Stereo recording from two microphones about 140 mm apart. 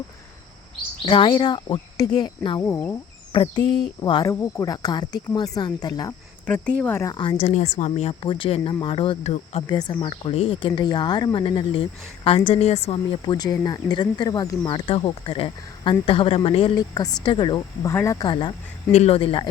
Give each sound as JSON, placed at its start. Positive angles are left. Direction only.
{"t": 1.0, "sound": "speech", "side_deg": 35}
{"t": 2.6, "sound": "speech", "side_deg": 15}
{"t": 3.3, "sound": "speech", "side_deg": 35}
{"t": 4.3, "sound": "speech", "side_deg": 20}
{"t": 6.4, "sound": "speech", "side_deg": 10}
{"t": 7.0, "sound": "speech", "side_deg": 30}
{"t": 7.5, "sound": "speech", "side_deg": 55}
{"t": 9.6, "sound": "speech", "side_deg": 35}
{"t": 13.3, "sound": "speech", "side_deg": 30}
{"t": 16.7, "sound": "speech", "side_deg": 25}
{"t": 17.8, "sound": "speech", "side_deg": 20}
{"t": 18.3, "sound": "speech", "side_deg": 35}
{"t": 18.9, "sound": "speech", "side_deg": 50}